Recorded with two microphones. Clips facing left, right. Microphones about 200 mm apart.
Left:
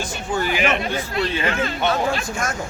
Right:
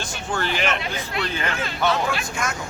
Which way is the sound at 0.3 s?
10° left (ahead or behind).